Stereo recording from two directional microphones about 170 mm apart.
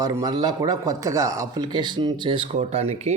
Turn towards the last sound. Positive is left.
turn(degrees=-40)  # may be behind; listen again after turning